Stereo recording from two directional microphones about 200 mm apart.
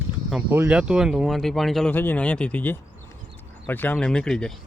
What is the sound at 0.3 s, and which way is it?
Speech, 5° right (ahead or behind).